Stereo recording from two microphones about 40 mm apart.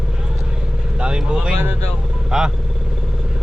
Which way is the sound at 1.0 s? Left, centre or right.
Right.